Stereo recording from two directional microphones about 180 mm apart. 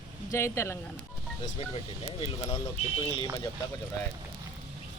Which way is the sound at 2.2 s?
30° left (ahead or behind).